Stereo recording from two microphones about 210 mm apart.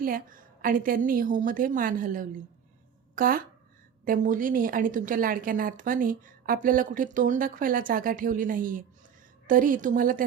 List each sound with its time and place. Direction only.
0.0 s a woman's voice: 40° right (ahead or behind)